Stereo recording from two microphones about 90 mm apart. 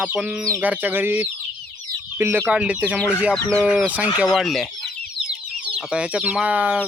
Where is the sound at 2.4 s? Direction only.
15° right (ahead or behind).